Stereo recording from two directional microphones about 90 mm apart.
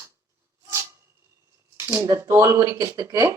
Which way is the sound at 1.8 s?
35° right (ahead or behind).